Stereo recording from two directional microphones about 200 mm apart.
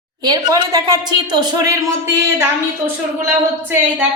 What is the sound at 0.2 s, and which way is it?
A woman's voice, 20° right (ahead or behind).